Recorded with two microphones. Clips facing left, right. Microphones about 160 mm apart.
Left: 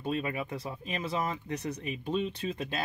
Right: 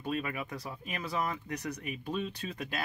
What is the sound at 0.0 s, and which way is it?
Speech, 25° left (ahead or behind).